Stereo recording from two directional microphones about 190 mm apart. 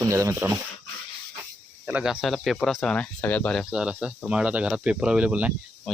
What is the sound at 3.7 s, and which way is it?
Speech, 5° right (ahead or behind).